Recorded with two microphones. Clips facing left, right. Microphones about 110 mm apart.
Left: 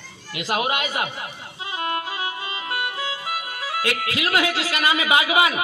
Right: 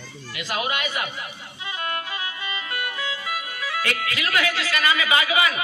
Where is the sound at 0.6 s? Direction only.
25° left (ahead or behind).